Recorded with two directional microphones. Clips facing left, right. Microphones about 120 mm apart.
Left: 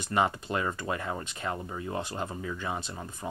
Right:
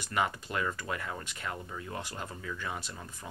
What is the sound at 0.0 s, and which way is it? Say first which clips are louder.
Speech: left 4 dB; 30° left (ahead or behind).